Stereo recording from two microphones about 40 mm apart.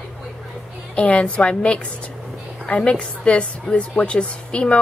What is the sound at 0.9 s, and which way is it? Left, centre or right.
A woman's voice, left.